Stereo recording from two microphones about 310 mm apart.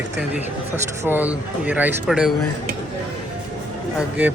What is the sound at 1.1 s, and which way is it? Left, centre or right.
Speech, centre.